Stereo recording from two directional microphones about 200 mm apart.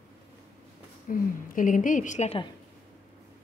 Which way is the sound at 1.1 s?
40° left (ahead or behind).